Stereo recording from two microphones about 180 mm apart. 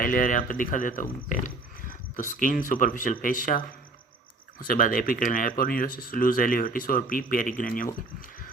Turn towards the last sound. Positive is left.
turn(degrees=50)  # may be behind; listen again after turning